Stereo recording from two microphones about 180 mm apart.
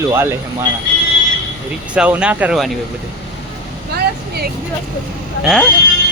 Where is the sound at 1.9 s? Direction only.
5° right (ahead or behind).